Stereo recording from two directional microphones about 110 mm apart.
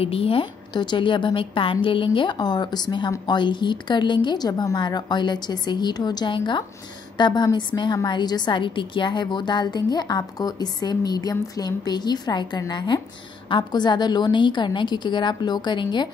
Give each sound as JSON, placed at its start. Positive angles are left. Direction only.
{"t": 0.0, "sound": "a woman's voice", "side_deg": 60}